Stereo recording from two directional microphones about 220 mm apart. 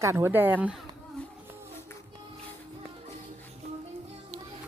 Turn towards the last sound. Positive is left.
turn(degrees=-30)  # may be behind; listen again after turning